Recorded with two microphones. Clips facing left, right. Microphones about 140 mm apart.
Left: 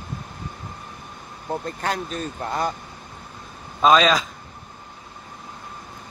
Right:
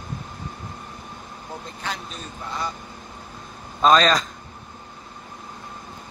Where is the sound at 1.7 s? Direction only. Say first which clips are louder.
Left 6 dB; 50° left (ahead or behind).